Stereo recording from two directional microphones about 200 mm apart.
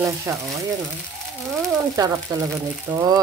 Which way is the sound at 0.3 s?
15° right (ahead or behind).